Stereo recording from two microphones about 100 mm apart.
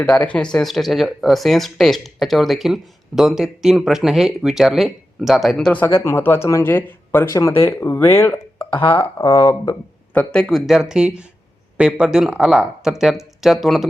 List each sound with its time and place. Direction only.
0.0 s speech: 15° left (ahead or behind)
5.8 s speech: 25° left (ahead or behind)
7.3 s speech: 30° left (ahead or behind)
8.5 s a sound: 60° left (ahead or behind)
9.0 s speech: 40° left (ahead or behind)
10.2 s speech: 10° left (ahead or behind)
10.7 s speech: 5° right (ahead or behind)